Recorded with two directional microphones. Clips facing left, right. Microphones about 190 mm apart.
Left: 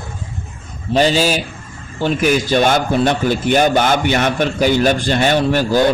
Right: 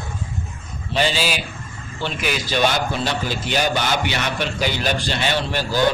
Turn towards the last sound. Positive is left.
turn(degrees=45)  # may be behind; listen again after turning